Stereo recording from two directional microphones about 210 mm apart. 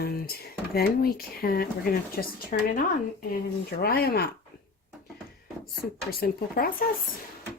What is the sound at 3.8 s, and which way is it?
Speech, 45° left (ahead or behind).